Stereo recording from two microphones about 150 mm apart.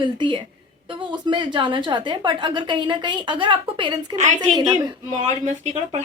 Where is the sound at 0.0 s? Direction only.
30° right (ahead or behind).